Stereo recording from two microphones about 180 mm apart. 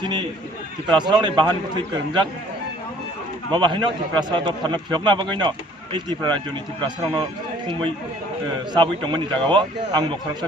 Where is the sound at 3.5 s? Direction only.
25° right (ahead or behind).